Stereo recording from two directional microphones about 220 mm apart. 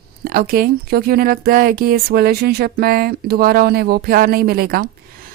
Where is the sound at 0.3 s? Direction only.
40° right (ahead or behind).